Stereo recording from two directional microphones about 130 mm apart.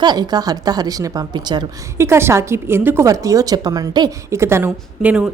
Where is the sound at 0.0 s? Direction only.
30° right (ahead or behind).